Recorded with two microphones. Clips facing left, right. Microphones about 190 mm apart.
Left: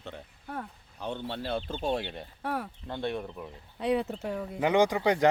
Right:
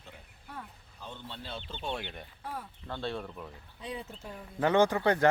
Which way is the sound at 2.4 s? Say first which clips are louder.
Left 8 dB; 70° left (ahead or behind).